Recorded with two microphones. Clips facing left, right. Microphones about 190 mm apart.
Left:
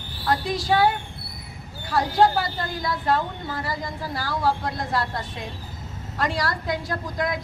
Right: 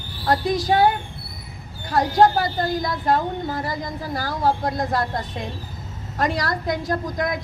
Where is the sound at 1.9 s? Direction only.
45° right (ahead or behind).